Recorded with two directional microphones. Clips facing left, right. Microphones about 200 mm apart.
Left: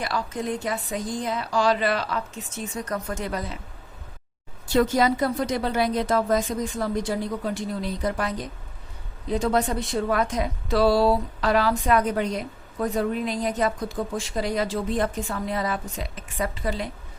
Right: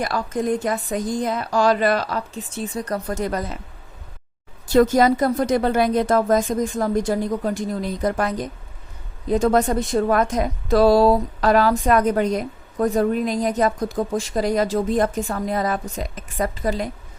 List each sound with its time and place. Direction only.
0.0 s a woman's voice: 45° right (ahead or behind)
4.7 s a woman's voice: 45° right (ahead or behind)